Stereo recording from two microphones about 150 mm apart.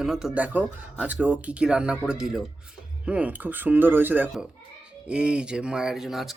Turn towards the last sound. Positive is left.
turn(degrees=0)  # may be behind; listen again after turning